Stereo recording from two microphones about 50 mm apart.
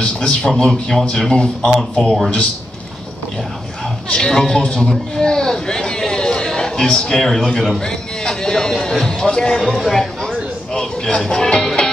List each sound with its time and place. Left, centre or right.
0.0 s a sound: centre
0.6 s speech: centre
1.7 s speech: centre
4.1 s a man's voice: centre
7.8 s music: centre